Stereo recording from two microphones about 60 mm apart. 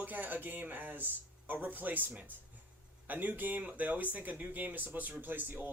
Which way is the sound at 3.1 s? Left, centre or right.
Right.